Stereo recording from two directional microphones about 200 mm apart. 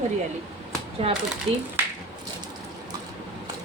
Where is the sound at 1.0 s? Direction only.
30° right (ahead or behind).